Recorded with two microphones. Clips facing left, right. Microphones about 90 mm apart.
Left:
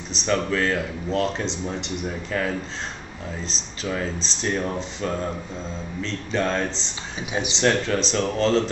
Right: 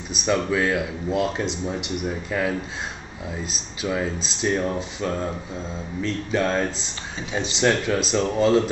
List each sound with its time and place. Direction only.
0.1 s speech: 10° right (ahead or behind)
7.2 s speech: 15° left (ahead or behind)
7.5 s speech: 5° right (ahead or behind)